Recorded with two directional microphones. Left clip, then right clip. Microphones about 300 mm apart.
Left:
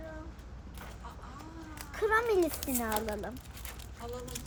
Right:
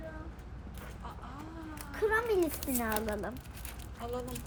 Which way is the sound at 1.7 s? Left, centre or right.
Centre.